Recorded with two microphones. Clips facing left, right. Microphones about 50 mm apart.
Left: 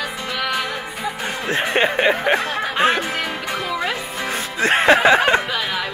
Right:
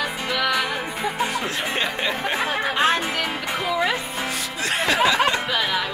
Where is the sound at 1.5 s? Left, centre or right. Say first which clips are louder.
Left 6 dB; left.